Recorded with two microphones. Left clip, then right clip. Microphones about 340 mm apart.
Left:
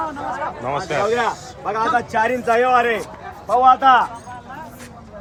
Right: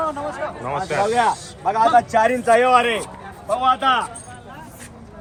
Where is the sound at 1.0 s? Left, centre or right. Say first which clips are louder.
Right 1 dB; right.